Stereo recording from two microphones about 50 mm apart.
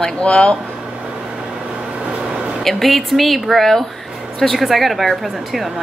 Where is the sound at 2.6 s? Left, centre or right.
Centre.